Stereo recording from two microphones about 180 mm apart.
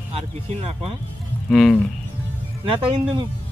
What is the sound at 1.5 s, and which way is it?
Speech, centre (ahead or behind).